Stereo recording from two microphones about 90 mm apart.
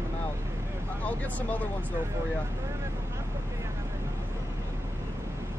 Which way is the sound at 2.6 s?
35° right (ahead or behind).